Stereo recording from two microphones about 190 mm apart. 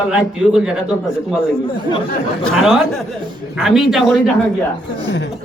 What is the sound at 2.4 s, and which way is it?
A man's voice, centre (ahead or behind).